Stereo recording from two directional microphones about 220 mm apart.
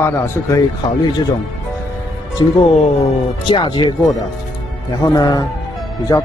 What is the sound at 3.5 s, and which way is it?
Speech, 20° left (ahead or behind).